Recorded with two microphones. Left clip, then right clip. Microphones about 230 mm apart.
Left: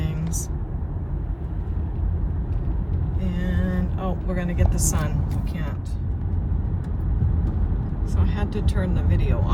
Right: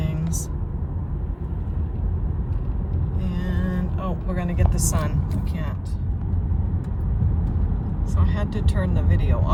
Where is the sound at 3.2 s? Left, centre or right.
Right.